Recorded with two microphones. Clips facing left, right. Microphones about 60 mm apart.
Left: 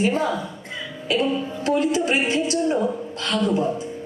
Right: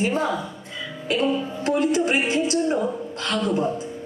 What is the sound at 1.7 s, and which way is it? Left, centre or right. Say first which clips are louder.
A woman's voice: even; right.